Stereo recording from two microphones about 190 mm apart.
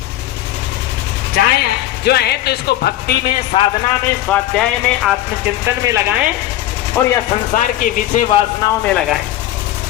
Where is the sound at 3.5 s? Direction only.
30° left (ahead or behind).